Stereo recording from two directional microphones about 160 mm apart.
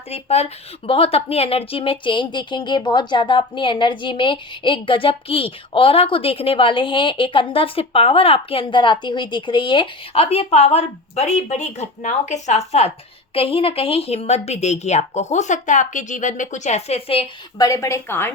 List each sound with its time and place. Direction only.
0.1 s speech: 40° left (ahead or behind)
17.6 s a woman's voice: 20° left (ahead or behind)